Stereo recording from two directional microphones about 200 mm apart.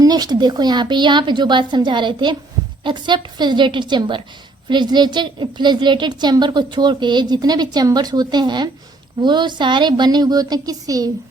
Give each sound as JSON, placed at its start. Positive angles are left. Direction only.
{"t": 0.0, "sound": "a woman's voice", "side_deg": -20}